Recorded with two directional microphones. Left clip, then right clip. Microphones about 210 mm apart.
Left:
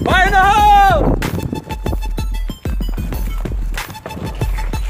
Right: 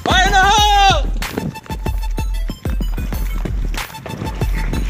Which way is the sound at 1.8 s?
Centre (ahead or behind).